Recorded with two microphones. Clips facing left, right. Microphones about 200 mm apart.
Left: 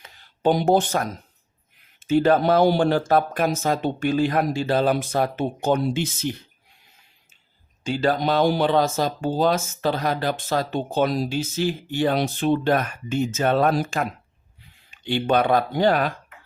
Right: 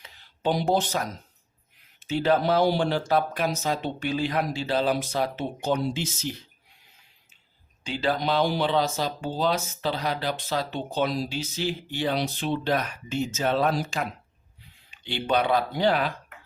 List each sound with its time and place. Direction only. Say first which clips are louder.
0.0 s a sound: left 6 dB; 50° left (ahead or behind)
2.0 s speech: left 5 dB; 50° left (ahead or behind)
7.9 s speech: left 4 dB; 45° left (ahead or behind)